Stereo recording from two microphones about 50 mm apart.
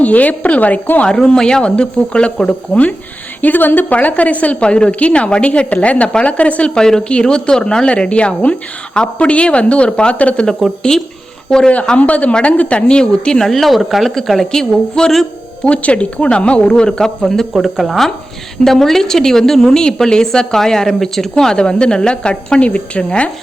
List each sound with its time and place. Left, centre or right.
0.0 s a woman's voice: left
1.0 s a woman's voice: centre
3.4 s a woman's voice: left
6.7 s a woman's voice: centre
11.9 s a woman's voice: left
13.5 s a woman's voice: centre
15.6 s a woman's voice: left